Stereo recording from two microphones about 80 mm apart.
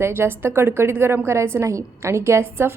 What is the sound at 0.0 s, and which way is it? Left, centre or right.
A woman's voice, right.